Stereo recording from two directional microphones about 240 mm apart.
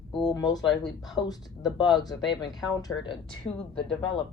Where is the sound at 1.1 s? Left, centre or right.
Centre.